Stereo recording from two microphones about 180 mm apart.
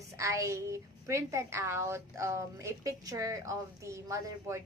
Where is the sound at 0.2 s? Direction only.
15° right (ahead or behind).